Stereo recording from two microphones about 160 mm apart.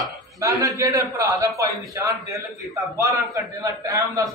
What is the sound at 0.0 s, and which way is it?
A man's voice, 20° right (ahead or behind).